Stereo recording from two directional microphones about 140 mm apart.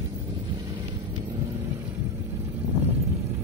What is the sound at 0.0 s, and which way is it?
Vehicle, 25° right (ahead or behind).